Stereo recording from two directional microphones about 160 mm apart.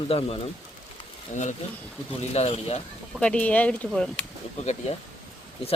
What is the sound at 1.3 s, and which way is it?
Speech, 50° left (ahead or behind).